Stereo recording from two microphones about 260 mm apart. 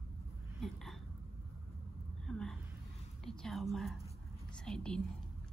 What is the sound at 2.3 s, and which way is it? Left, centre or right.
A woman's voice, centre.